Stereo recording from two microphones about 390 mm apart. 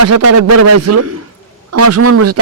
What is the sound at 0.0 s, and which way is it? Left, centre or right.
A man's voice, right.